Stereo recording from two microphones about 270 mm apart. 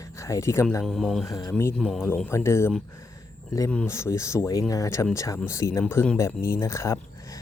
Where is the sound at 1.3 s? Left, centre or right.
Centre.